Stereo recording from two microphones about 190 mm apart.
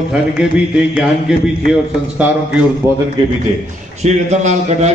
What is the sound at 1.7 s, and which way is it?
A man's voice, 5° right (ahead or behind).